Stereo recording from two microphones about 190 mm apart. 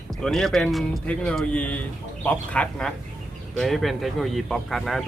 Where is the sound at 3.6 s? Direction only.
Centre (ahead or behind).